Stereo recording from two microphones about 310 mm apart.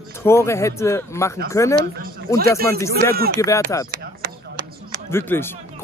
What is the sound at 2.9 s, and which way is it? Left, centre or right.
Speech, right.